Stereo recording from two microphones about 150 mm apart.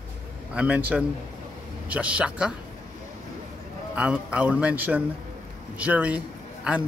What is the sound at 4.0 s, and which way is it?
A man's voice, 10° right (ahead or behind).